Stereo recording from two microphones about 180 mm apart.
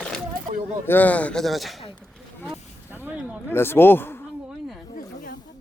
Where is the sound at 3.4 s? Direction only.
10° left (ahead or behind).